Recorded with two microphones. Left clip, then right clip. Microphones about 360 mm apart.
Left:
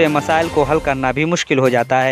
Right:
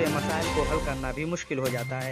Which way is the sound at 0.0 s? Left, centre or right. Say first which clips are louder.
Left 13 dB; left.